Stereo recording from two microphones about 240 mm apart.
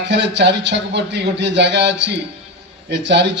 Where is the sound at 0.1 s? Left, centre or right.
Right.